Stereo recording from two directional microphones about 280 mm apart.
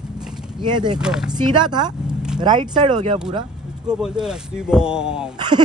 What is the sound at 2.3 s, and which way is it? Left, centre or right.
Speech, centre.